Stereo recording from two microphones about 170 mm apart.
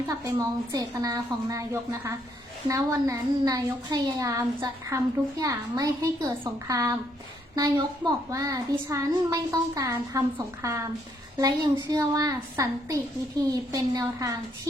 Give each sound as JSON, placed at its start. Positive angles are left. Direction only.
{"t": 0.3, "sound": "a child's voice", "side_deg": -20}